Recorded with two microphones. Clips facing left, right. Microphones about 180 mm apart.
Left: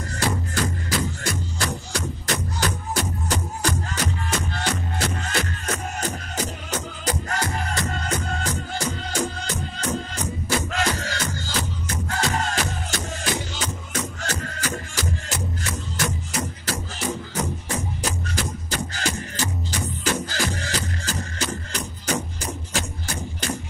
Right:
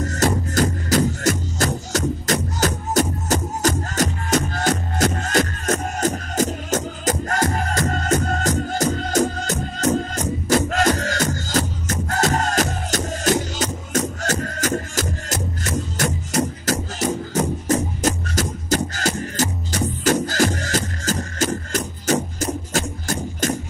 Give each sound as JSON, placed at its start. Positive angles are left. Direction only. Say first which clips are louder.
{"t": 0.0, "sound": "music", "louder": "right 6 dB", "side_deg": -45}